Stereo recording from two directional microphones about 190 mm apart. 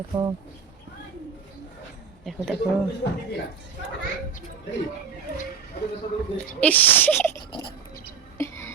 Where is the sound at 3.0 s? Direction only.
65° left (ahead or behind).